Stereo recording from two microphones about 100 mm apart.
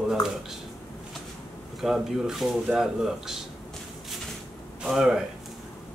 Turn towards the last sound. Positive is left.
turn(degrees=-5)  # may be behind; listen again after turning